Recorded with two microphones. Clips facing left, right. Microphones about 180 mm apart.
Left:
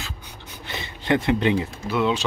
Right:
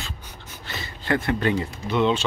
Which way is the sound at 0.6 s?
20° left (ahead or behind).